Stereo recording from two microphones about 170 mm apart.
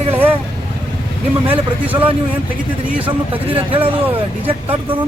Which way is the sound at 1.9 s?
10° right (ahead or behind).